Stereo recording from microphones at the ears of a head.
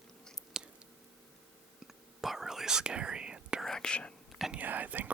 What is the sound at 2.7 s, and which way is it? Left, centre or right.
Speech, right.